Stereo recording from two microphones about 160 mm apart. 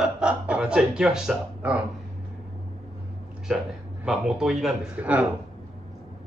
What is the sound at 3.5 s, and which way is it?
A man's voice, centre (ahead or behind).